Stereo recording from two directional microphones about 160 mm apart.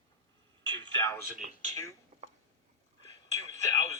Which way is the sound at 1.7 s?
20° left (ahead or behind).